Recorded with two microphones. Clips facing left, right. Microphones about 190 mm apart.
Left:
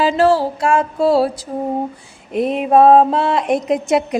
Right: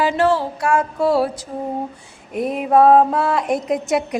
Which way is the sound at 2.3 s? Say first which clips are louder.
Left 3 dB; 25° left (ahead or behind).